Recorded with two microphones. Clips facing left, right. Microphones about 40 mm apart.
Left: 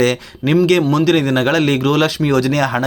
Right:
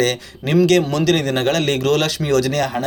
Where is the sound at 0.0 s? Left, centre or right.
Left.